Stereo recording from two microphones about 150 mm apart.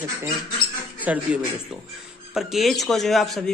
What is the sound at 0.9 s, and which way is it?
A man's voice, 10° right (ahead or behind).